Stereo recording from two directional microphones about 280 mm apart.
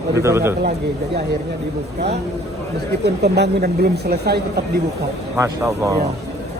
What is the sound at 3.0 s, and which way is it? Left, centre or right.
Speech, right.